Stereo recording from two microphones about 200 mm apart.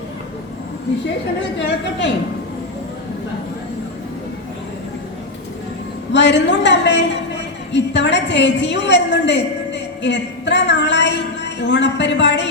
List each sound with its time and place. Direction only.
1.5 s a woman's voice: 60° left (ahead or behind)
6.1 s a woman's voice: 60° left (ahead or behind)